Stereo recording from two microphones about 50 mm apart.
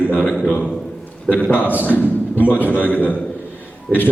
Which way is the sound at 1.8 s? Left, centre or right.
Left.